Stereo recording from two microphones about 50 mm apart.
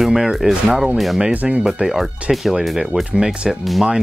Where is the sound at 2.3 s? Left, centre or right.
Centre.